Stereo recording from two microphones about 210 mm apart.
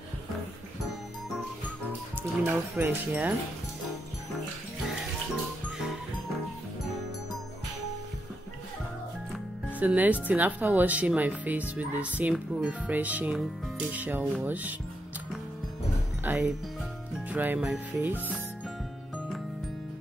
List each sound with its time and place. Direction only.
2.4 s speech: 10° right (ahead or behind)
9.8 s speech: 5° right (ahead or behind)
16.3 s speech: 5° right (ahead or behind)